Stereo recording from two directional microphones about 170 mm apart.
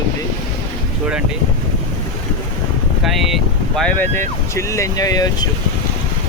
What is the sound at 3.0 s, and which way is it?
Speech, centre (ahead or behind).